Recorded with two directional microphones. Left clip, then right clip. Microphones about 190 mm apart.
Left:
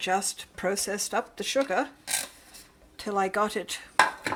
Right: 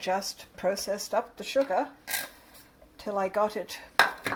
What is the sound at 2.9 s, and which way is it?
Speech, 25° left (ahead or behind).